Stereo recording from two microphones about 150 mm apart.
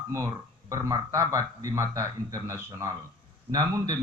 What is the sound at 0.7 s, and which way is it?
A man's voice, 20° right (ahead or behind).